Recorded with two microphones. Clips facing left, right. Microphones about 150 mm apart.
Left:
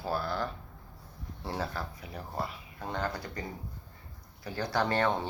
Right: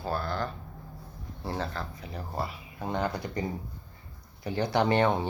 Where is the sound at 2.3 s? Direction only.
5° right (ahead or behind).